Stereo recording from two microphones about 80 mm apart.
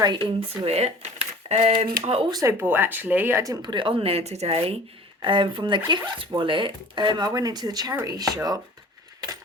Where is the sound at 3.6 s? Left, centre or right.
Right.